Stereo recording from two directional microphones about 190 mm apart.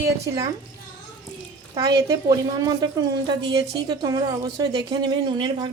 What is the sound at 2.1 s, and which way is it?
A woman's voice, 20° right (ahead or behind).